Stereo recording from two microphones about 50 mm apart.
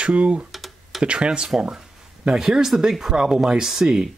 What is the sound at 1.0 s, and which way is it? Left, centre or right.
Speech, right.